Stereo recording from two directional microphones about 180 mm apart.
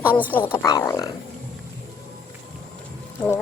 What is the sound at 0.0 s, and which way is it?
Speech, 10° right (ahead or behind).